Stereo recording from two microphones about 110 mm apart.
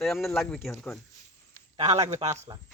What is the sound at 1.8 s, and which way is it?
Speech, 90° right.